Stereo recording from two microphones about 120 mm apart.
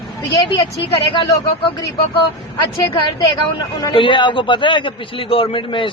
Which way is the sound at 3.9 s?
45° left (ahead or behind).